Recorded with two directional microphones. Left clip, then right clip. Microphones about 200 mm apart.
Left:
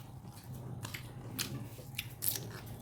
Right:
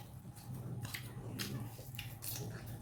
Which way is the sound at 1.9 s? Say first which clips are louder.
Left 8 dB; 60° left (ahead or behind).